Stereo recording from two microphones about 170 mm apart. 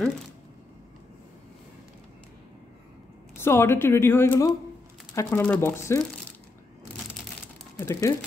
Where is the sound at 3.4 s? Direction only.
15° left (ahead or behind).